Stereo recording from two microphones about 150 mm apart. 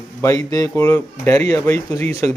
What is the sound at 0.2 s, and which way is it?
Speech, 20° left (ahead or behind).